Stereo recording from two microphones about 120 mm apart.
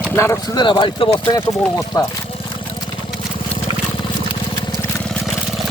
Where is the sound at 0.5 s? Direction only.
40° left (ahead or behind).